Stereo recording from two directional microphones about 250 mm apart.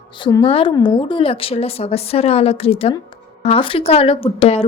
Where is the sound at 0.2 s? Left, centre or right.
Centre.